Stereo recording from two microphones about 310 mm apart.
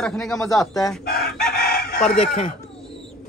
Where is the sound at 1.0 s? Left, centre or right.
Left.